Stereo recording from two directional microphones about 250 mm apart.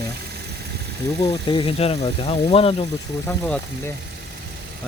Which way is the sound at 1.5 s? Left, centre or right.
Left.